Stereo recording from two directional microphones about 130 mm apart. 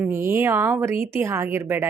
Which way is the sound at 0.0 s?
20° right (ahead or behind).